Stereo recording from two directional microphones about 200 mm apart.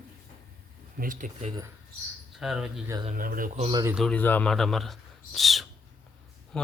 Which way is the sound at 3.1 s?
45° right (ahead or behind).